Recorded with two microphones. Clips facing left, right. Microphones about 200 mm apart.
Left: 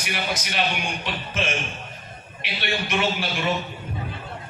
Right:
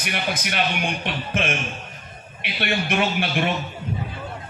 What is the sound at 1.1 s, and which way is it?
Speech, 55° right (ahead or behind).